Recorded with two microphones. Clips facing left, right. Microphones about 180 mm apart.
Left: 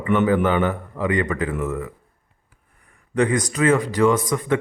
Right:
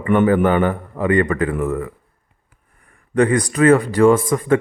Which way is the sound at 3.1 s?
60° right (ahead or behind).